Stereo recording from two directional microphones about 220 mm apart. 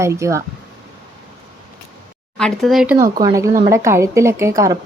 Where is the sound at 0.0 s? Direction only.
15° right (ahead or behind).